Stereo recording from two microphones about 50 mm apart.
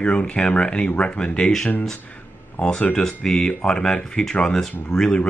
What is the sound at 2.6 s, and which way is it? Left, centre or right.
Speech, centre.